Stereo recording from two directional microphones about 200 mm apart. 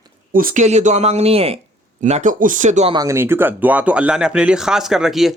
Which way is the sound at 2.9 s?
15° right (ahead or behind).